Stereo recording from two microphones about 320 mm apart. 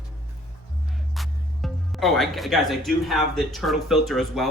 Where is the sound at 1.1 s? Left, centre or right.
Centre.